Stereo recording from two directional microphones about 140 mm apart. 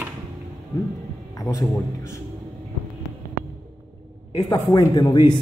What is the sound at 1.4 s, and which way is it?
Speech, 25° left (ahead or behind).